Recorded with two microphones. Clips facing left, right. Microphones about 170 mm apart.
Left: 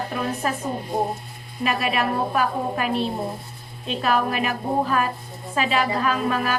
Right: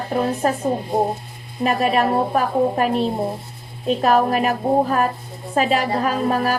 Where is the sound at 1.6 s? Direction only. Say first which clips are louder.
Right 5 dB; 40° right (ahead or behind).